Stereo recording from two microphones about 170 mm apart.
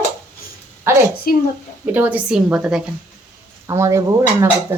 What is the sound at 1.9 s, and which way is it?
Speech, 10° right (ahead or behind).